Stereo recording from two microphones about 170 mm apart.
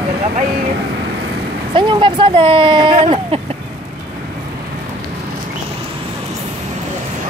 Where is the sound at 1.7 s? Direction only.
30° right (ahead or behind).